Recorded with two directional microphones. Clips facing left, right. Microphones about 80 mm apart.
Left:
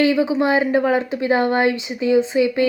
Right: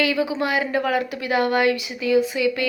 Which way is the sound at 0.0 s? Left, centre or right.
Left.